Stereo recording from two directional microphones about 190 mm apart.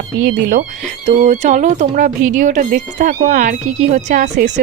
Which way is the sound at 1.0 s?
35° right (ahead or behind).